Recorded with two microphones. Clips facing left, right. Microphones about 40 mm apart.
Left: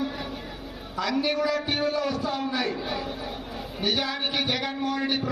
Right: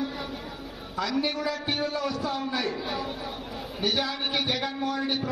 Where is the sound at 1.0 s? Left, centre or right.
Left.